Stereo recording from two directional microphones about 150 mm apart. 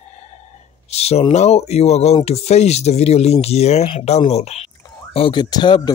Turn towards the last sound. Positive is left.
turn(degrees=30)  # may be behind; listen again after turning